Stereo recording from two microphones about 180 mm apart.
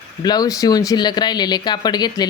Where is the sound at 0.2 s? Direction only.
20° left (ahead or behind).